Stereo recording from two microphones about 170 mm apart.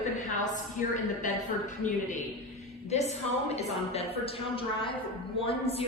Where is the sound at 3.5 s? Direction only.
35° left (ahead or behind).